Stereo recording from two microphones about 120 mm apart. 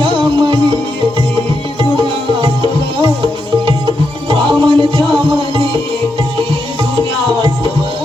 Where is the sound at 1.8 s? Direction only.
40° right (ahead or behind).